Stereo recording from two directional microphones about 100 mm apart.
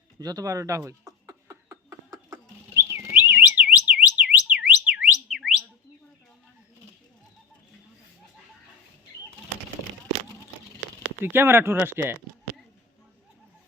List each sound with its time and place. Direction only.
0.2 s speech: 40° right (ahead or behind)
0.9 s a sound: 35° right (ahead or behind)
2.3 s bird: 30° right (ahead or behind)
3.1 s alarm: 10° right (ahead or behind)
5.3 s whistle: centre (ahead or behind)
11.2 s speech: 20° right (ahead or behind)